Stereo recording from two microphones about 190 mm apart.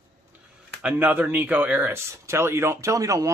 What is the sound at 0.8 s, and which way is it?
Speech, 5° right (ahead or behind).